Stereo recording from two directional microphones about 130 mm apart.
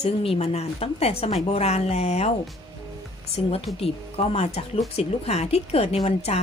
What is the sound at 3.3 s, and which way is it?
A woman's voice, 50° left (ahead or behind).